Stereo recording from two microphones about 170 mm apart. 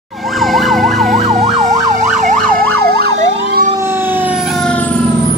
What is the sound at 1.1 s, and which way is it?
Emergency vehicle, 40° right (ahead or behind).